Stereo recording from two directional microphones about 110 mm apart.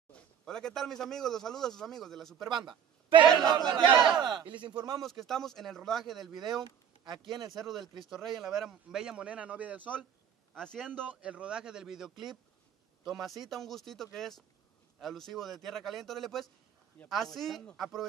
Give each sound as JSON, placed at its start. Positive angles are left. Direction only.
{"t": 0.1, "sound": "a man's voice", "side_deg": 5}
{"t": 2.5, "sound": "speech", "side_deg": -45}
{"t": 5.0, "sound": "a man's voice", "side_deg": 0}
{"t": 6.5, "sound": "speech", "side_deg": -40}
{"t": 7.5, "sound": "a man's voice", "side_deg": 0}
{"t": 10.5, "sound": "a man's voice", "side_deg": 5}
{"t": 11.1, "sound": "a man's voice", "side_deg": -10}